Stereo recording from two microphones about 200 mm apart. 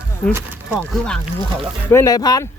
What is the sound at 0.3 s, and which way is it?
Speech, 10° right (ahead or behind).